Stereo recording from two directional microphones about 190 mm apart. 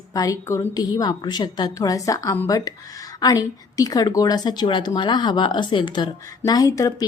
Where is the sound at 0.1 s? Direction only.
20° left (ahead or behind).